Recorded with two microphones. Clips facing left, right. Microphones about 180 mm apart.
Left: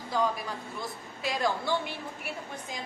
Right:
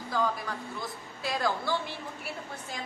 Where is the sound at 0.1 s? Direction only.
20° left (ahead or behind).